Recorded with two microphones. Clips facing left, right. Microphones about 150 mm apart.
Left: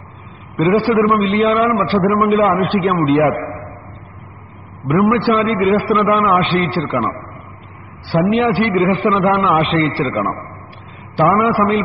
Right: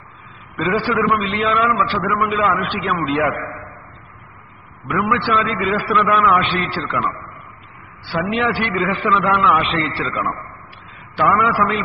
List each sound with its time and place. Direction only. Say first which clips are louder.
0.6 s a man's voice: left 6 dB; 25° left (ahead or behind); by 2.6 s 40° left (ahead or behind)
2.9 s a man's voice: left 4 dB; 25° left (ahead or behind)
5.0 s a man's voice: left 5 dB; 35° left (ahead or behind)
8.1 s a man's voice: left 6 dB; 25° left (ahead or behind)